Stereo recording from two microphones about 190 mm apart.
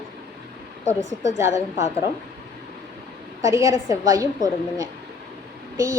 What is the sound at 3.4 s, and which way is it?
A woman's voice, 15° right (ahead or behind).